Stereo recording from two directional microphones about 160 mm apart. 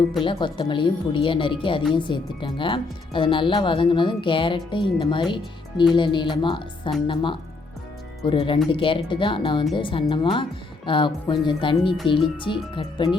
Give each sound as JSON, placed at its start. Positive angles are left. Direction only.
{"t": 0.2, "sound": "a woman's voice", "side_deg": 30}